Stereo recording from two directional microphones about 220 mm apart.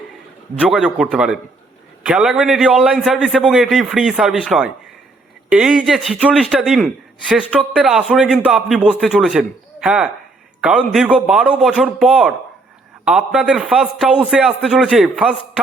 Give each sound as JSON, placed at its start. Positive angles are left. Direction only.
{"t": 0.6, "sound": "a man's voice", "side_deg": -5}